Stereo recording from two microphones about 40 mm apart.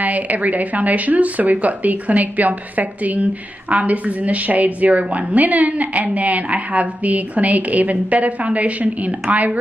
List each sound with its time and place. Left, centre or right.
0.0 s a woman's voice: right